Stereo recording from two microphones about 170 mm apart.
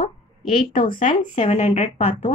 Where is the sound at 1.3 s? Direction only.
40° left (ahead or behind).